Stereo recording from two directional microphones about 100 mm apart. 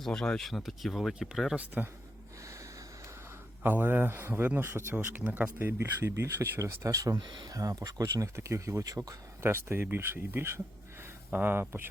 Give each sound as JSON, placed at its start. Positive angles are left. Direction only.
{"t": 0.0, "sound": "speech", "side_deg": 5}
{"t": 1.5, "sound": "speech", "side_deg": -15}
{"t": 3.6, "sound": "speech", "side_deg": -20}
{"t": 7.2, "sound": "speech", "side_deg": -50}
{"t": 7.5, "sound": "speech", "side_deg": -35}